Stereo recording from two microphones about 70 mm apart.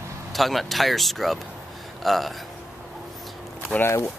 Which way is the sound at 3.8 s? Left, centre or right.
Left.